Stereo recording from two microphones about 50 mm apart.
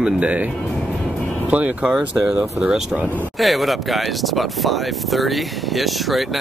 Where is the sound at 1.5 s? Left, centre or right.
Right.